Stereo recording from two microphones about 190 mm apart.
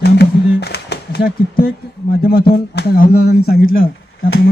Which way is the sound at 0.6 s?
60° left (ahead or behind).